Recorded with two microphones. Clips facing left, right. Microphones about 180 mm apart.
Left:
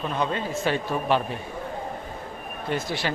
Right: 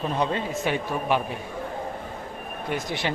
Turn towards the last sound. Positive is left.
turn(degrees=-20)  # may be behind; listen again after turning